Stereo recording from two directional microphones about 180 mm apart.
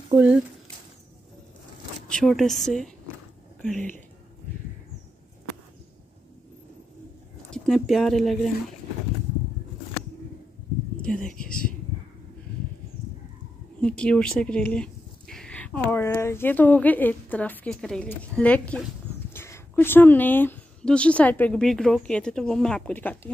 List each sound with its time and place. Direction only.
0.1 s speech: 10° right (ahead or behind)
2.0 s a woman's voice: 5° left (ahead or behind)
7.5 s speech: 5° left (ahead or behind)
11.3 s speech: 50° left (ahead or behind)
13.7 s speech: 5° left (ahead or behind)